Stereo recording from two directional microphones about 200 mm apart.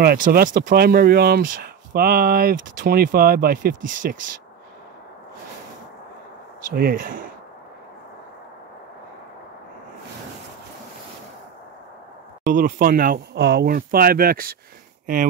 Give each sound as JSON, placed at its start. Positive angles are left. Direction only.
{"t": 0.0, "sound": "speech", "side_deg": -50}
{"t": 6.7, "sound": "speech", "side_deg": -45}
{"t": 12.4, "sound": "speech", "side_deg": -45}